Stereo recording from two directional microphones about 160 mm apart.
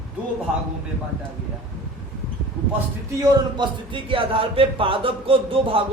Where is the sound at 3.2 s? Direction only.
30° right (ahead or behind).